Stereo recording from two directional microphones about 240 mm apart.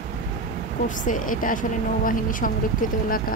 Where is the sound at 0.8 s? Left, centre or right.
Left.